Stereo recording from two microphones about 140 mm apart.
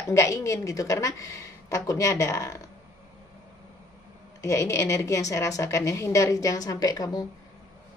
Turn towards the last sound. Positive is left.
turn(degrees=25)  # may be behind; listen again after turning